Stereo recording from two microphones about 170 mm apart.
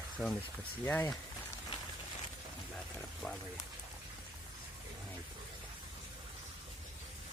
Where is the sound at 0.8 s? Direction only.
15° left (ahead or behind).